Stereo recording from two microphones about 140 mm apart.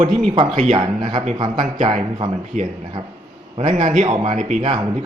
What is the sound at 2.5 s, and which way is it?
Speech, 65° right (ahead or behind).